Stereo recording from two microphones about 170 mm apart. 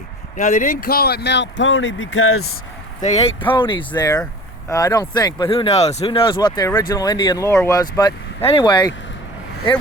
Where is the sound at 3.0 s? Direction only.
40° left (ahead or behind).